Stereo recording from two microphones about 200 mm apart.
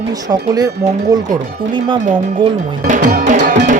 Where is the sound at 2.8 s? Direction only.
45° right (ahead or behind).